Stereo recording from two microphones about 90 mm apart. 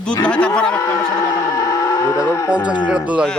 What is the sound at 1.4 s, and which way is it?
Vehicle, 40° left (ahead or behind).